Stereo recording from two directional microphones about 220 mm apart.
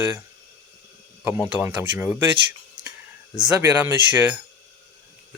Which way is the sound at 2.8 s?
20° right (ahead or behind).